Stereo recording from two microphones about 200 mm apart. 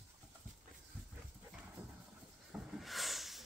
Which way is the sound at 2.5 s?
Centre (ahead or behind).